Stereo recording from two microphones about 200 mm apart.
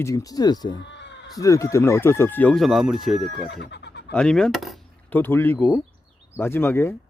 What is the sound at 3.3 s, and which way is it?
Speech, 60° left (ahead or behind).